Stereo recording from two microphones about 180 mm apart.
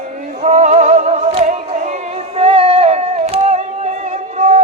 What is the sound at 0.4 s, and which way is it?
Music, 40° right (ahead or behind).